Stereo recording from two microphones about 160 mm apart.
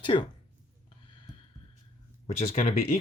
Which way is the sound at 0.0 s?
30° left (ahead or behind).